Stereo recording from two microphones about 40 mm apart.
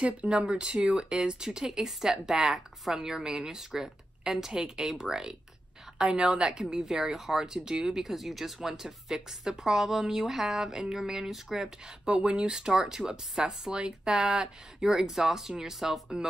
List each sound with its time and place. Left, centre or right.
0.0 s speech: right
0.5 s speech: centre
12.1 s speech: right; by 16.0 s centre